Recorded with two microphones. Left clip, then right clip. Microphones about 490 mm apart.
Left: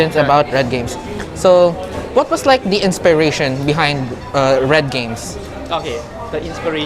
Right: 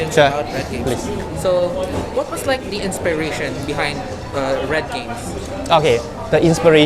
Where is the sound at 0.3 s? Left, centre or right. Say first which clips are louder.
Left 9 dB; left.